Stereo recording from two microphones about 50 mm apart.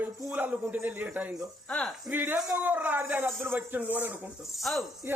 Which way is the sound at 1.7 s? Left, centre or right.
Left.